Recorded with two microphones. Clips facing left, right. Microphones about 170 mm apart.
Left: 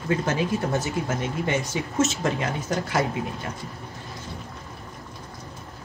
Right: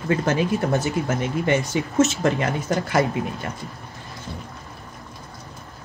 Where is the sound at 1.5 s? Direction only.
60° right (ahead or behind).